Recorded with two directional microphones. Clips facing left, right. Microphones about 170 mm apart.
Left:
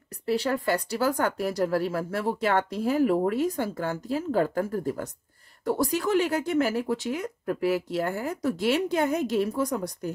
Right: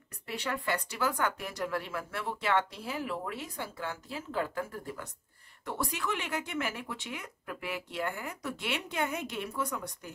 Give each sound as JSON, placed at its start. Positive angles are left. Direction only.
{"t": 0.3, "sound": "speech", "side_deg": 35}